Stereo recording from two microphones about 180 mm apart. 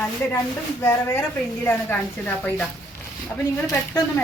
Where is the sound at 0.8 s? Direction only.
15° left (ahead or behind).